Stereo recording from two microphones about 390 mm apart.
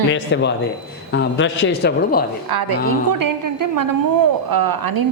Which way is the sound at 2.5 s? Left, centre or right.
Right.